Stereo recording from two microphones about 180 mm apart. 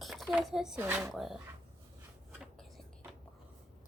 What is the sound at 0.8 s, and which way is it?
Speech, 15° right (ahead or behind).